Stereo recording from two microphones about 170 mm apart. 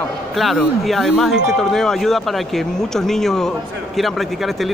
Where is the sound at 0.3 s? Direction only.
Centre (ahead or behind).